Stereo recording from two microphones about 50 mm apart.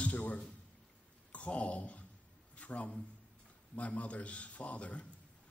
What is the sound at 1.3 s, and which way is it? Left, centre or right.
Speech, left.